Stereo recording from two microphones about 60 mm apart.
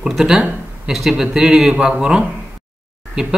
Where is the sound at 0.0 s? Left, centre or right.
Centre.